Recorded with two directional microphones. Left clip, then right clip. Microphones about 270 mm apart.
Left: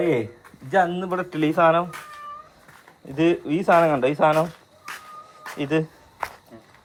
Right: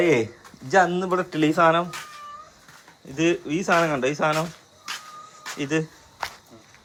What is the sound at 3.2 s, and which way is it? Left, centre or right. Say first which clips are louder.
Speech: left 2 dB; centre.